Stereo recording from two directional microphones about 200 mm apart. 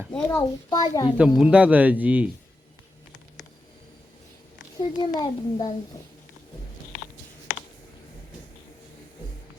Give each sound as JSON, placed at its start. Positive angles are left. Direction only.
{"t": 0.1, "sound": "speech", "side_deg": 5}
{"t": 0.7, "sound": "a child's voice", "side_deg": 20}
{"t": 1.2, "sound": "speech", "side_deg": -5}
{"t": 4.8, "sound": "a child's voice", "side_deg": 20}